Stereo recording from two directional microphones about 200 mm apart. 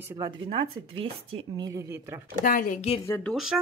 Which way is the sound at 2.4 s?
45° left (ahead or behind).